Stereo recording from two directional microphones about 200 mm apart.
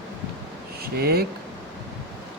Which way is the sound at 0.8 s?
50° right (ahead or behind).